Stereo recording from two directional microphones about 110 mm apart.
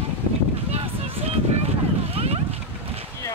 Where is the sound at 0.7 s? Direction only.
70° right (ahead or behind).